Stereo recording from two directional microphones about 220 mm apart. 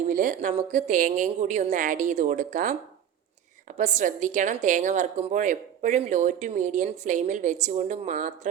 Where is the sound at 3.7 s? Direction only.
35° right (ahead or behind).